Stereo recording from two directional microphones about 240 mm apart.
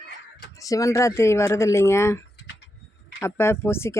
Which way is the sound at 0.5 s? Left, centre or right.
Centre.